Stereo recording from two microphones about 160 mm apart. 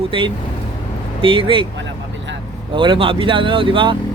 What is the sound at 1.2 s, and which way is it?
Speech, 35° right (ahead or behind).